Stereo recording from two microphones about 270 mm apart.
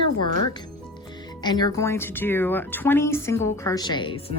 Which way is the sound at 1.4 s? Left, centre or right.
Centre.